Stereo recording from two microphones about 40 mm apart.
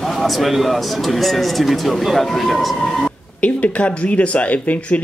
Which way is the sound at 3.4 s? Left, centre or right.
Left.